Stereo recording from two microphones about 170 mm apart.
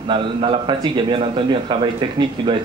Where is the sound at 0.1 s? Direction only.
30° right (ahead or behind).